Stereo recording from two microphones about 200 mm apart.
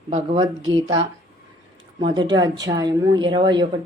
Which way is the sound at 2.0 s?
20° right (ahead or behind).